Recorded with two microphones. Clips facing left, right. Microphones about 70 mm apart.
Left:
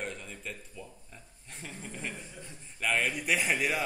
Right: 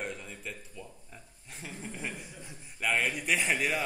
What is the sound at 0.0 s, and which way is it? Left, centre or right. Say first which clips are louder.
A man's voice: even; centre.